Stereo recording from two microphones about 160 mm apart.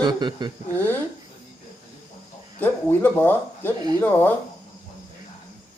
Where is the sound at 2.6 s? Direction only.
10° left (ahead or behind).